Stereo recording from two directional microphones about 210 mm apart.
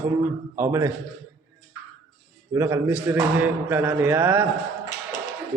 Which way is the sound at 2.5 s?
15° right (ahead or behind).